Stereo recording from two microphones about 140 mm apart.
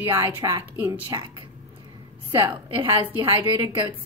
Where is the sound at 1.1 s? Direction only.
30° right (ahead or behind).